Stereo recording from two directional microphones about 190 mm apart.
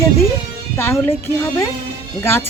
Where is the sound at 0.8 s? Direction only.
10° left (ahead or behind).